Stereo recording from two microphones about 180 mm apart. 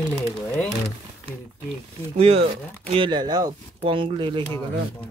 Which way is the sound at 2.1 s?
35° right (ahead or behind).